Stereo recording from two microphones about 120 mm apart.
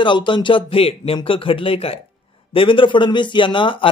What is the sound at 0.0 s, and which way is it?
A man's voice, 45° left (ahead or behind).